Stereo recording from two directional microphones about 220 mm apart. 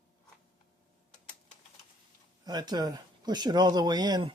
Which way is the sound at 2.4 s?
20° right (ahead or behind).